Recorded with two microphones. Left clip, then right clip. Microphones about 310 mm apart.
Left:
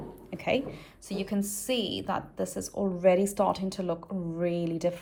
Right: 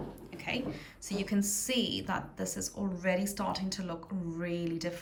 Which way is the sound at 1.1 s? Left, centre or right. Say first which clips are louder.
Left 1 dB; centre.